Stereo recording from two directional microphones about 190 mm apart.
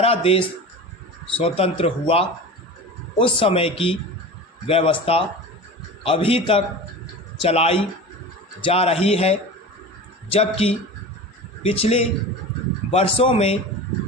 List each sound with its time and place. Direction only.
0.0 s speech: 30° left (ahead or behind)